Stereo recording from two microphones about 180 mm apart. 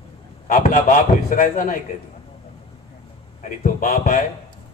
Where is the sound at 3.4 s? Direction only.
45° left (ahead or behind).